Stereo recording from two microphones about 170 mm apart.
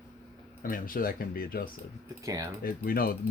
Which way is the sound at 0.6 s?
55° left (ahead or behind).